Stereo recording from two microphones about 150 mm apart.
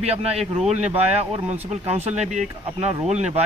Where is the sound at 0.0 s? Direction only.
45° right (ahead or behind).